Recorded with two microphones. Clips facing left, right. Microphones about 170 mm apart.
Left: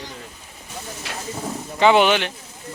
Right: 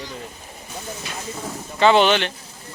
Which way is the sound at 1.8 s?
10° left (ahead or behind).